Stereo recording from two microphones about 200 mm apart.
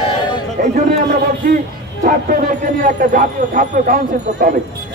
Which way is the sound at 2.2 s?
40° right (ahead or behind).